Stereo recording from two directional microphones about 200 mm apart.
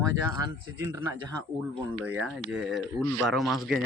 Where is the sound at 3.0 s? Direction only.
10° left (ahead or behind).